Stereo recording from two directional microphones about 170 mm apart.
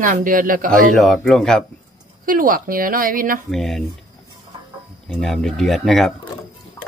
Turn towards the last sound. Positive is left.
turn(degrees=0)  # may be behind; listen again after turning